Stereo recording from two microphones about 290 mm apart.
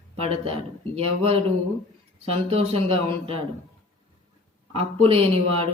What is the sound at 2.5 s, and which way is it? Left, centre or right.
Speech, centre.